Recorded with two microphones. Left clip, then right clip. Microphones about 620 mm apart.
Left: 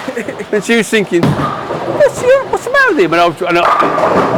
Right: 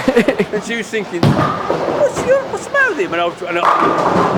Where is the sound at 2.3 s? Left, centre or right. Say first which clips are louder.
Left 4 dB; left.